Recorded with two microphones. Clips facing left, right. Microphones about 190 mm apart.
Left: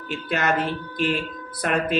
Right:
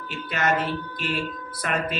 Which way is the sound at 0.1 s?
50° left (ahead or behind).